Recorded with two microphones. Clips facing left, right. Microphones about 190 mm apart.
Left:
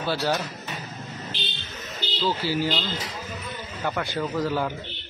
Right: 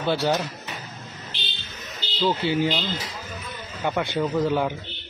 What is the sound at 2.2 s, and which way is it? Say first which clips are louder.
A man's voice: right 3 dB; 20° right (ahead or behind).